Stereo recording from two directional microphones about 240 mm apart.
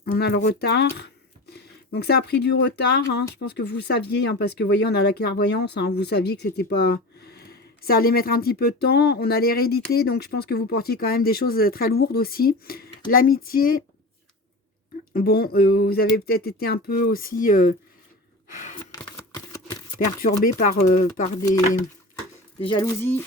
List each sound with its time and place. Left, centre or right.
0.0 s speech: left
15.1 s speech: left
18.9 s a sound: centre
20.2 s speech: left
22.6 s speech: centre